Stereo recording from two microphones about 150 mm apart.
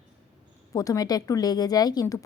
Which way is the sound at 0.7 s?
25° left (ahead or behind).